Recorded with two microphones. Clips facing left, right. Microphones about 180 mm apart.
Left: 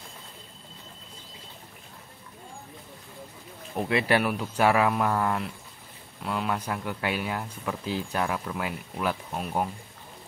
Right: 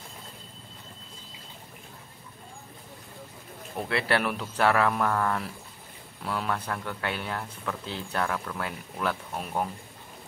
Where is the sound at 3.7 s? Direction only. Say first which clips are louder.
Left 3 dB; 15° left (ahead or behind).